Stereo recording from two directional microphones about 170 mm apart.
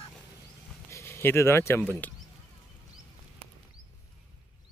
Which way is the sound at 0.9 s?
15° left (ahead or behind).